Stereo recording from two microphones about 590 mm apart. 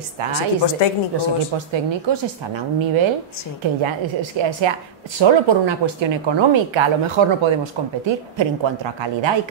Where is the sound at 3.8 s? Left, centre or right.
Right.